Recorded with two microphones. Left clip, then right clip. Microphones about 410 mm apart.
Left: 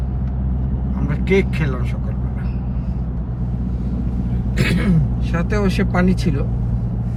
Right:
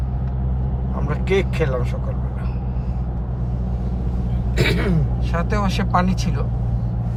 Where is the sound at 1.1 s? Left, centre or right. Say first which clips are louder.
Left 2 dB; centre.